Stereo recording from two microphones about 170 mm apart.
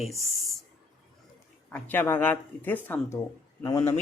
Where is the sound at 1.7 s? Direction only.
10° left (ahead or behind).